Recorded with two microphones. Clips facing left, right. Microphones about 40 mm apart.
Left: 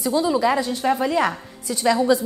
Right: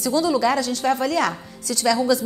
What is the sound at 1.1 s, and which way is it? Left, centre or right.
A woman's voice, left.